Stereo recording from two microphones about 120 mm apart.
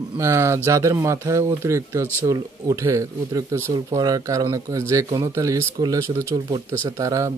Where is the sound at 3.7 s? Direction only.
35° right (ahead or behind).